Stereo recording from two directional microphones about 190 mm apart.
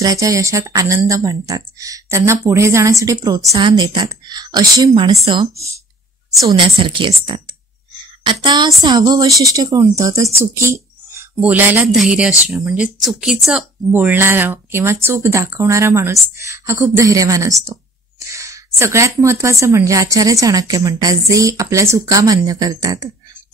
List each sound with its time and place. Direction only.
0.0 s a woman's voice: 15° right (ahead or behind)
10.4 s a sound: 15° right (ahead or behind)
11.4 s speech: 10° right (ahead or behind)